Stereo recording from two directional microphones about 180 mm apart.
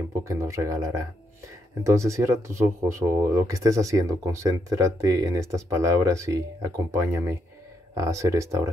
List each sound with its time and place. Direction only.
0.3 s speech: 15° right (ahead or behind)